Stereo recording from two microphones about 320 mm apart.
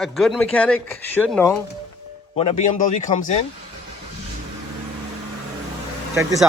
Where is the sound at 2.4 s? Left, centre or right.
Centre.